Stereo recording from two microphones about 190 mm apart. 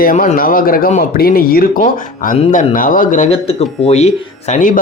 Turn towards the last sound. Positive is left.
turn(degrees=45)  # may be behind; listen again after turning